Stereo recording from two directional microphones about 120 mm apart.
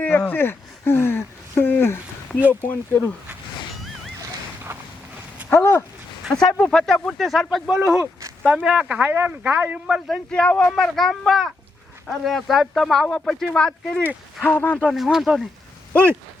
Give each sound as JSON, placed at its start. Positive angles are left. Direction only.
{"t": 0.0, "sound": "speech", "side_deg": 15}
{"t": 5.5, "sound": "speech", "side_deg": 20}
{"t": 6.3, "sound": "speech", "side_deg": 5}
{"t": 8.4, "sound": "speech", "side_deg": -10}
{"t": 9.8, "sound": "speech", "side_deg": 0}
{"t": 10.3, "sound": "speech", "side_deg": 10}
{"t": 14.8, "sound": "speech", "side_deg": -5}
{"t": 15.9, "sound": "speech", "side_deg": 15}